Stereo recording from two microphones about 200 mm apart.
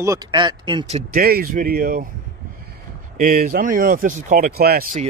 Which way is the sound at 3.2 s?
45° right (ahead or behind).